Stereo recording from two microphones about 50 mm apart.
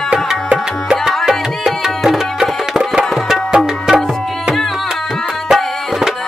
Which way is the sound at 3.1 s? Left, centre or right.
Centre.